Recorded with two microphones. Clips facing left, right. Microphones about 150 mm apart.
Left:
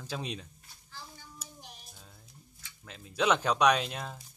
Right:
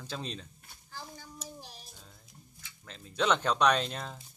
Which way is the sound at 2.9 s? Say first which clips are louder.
Left 1 dB; 5° left (ahead or behind).